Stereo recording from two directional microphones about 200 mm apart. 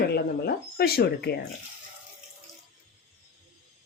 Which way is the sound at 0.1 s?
55° left (ahead or behind).